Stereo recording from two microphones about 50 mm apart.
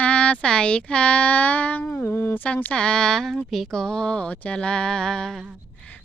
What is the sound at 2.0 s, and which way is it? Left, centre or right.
Speech, left.